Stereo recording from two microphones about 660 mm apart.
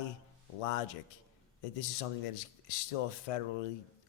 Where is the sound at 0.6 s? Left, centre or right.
Left.